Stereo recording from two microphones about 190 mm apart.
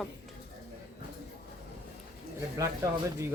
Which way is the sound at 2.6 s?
15° right (ahead or behind).